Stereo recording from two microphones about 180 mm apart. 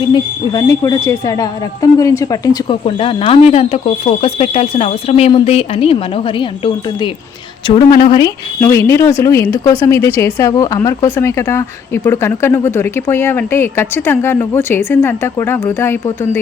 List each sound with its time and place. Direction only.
0.1 s a woman's voice: 20° left (ahead or behind)
7.8 s speech: 25° left (ahead or behind)